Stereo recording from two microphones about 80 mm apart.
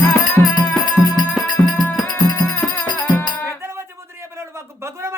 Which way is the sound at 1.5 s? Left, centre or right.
Left.